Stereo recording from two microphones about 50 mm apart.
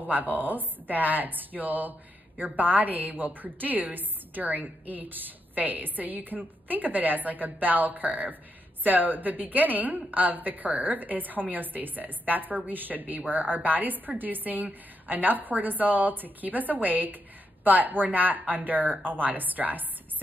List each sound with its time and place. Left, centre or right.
0.0 s a woman's voice: right